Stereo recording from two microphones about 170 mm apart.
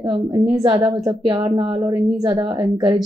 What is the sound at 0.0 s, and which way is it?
A woman's voice, 25° right (ahead or behind).